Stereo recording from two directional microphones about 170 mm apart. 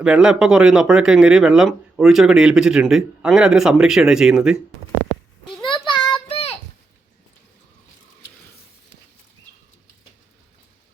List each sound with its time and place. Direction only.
0.0 s speech: 5° right (ahead or behind)
5.6 s child singing: 30° left (ahead or behind)